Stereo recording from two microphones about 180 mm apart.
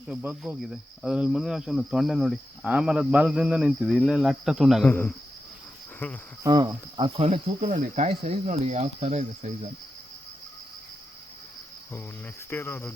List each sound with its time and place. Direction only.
0.1 s speech: 5° right (ahead or behind)
4.9 s cricket: 10° left (ahead or behind)
6.4 s speech: 20° right (ahead or behind); by 9.5 s 40° right (ahead or behind)
12.5 s cricket: 10° left (ahead or behind)